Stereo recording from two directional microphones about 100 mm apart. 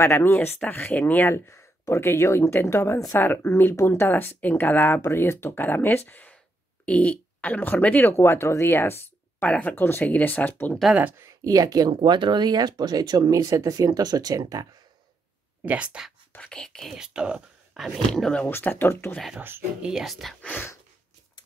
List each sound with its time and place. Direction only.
0.0 s speech: 25° left (ahead or behind)
11.0 s speech: 15° right (ahead or behind)
11.4 s speech: 40° right (ahead or behind)
15.6 s speech: 15° right (ahead or behind)
16.3 s speech: 10° left (ahead or behind)
16.9 s speech: 10° right (ahead or behind)
18.4 s speech: 15° left (ahead or behind)
19.1 s speech: centre (ahead or behind)
20.4 s speech: 15° left (ahead or behind)